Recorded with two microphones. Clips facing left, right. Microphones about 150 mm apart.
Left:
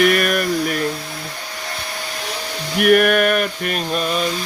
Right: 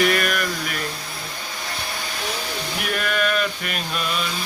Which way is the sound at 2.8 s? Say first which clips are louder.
Left 12 dB; 60° left (ahead or behind).